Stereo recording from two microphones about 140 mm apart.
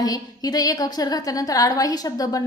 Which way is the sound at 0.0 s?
25° left (ahead or behind).